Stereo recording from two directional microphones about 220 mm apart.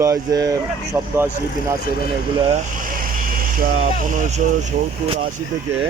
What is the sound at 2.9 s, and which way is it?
Vehicle, 40° right (ahead or behind).